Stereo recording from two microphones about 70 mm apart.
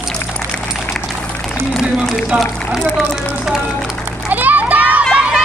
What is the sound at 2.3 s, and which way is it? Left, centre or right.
Run, centre.